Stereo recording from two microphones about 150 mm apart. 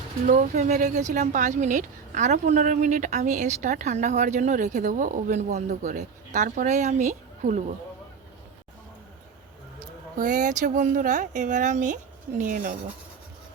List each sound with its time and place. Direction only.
0.3 s speech: 50° right (ahead or behind)
10.2 s speech: 60° right (ahead or behind)